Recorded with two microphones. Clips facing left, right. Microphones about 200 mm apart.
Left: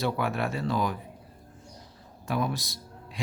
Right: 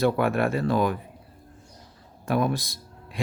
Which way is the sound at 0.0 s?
55° right (ahead or behind).